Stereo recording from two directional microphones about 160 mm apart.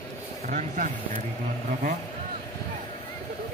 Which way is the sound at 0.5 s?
50° right (ahead or behind).